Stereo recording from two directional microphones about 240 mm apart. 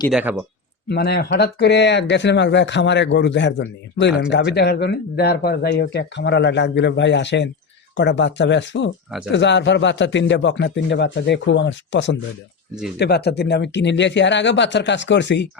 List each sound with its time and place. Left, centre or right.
0.1 s speech: centre
0.9 s speech: left